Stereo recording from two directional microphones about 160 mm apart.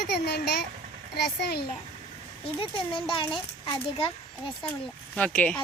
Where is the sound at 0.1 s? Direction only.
90° left.